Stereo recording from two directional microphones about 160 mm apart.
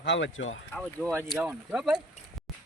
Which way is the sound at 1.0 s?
5° left (ahead or behind).